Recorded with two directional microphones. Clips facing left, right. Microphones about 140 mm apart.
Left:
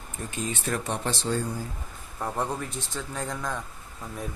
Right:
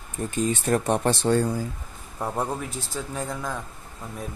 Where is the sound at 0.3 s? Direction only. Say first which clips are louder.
Right 7 dB; 40° right (ahead or behind); by 1.5 s 65° right (ahead or behind).